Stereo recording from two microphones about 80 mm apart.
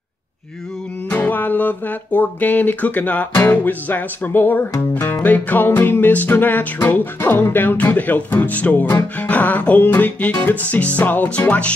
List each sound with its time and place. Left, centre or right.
1.1 s speech: left